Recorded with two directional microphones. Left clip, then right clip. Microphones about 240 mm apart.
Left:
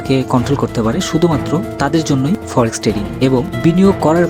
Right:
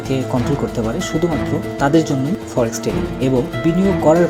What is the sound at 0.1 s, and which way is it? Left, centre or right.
Speech, left.